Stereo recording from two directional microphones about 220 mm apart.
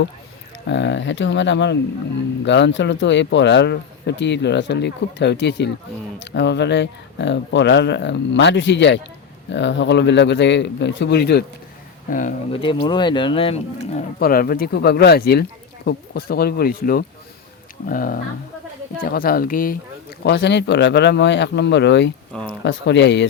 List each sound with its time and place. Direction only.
0.7 s speech: 55° left (ahead or behind)
12.1 s speech: 35° left (ahead or behind)
12.5 s speech: 25° left (ahead or behind)
14.2 s speech: 40° left (ahead or behind)
20.2 s speech: 50° left (ahead or behind)